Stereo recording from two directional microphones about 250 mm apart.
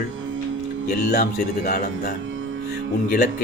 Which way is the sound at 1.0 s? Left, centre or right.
Left.